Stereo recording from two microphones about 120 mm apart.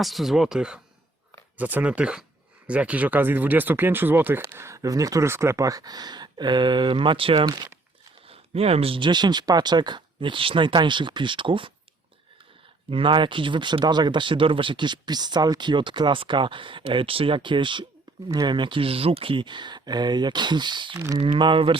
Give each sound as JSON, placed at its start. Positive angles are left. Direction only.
{"t": 0.0, "sound": "speech", "side_deg": 0}
{"t": 8.3, "sound": "speech", "side_deg": -55}
{"t": 12.9, "sound": "speech", "side_deg": -45}
{"t": 20.9, "sound": "speech", "side_deg": -25}
{"t": 21.2, "sound": "speech", "side_deg": -40}